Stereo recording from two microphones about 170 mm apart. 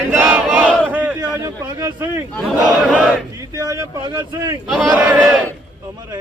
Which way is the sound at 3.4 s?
20° right (ahead or behind).